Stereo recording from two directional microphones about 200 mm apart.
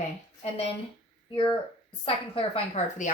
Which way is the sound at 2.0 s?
30° left (ahead or behind).